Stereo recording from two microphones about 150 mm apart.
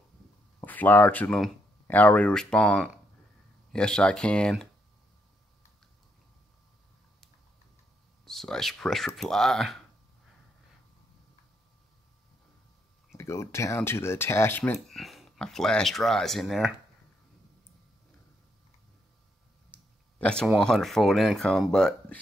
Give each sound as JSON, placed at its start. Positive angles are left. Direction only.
{"t": 0.6, "sound": "speech", "side_deg": 10}
{"t": 8.3, "sound": "speech", "side_deg": 0}
{"t": 13.2, "sound": "speech", "side_deg": 20}
{"t": 14.9, "sound": "speech", "side_deg": 0}
{"t": 20.2, "sound": "speech", "side_deg": 5}